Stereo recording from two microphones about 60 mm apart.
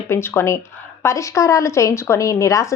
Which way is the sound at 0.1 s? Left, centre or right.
Left.